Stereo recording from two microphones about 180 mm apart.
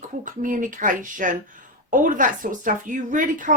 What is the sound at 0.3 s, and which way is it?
Speech, 45° right (ahead or behind).